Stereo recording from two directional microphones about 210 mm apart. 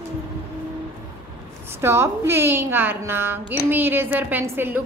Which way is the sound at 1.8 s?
10° right (ahead or behind).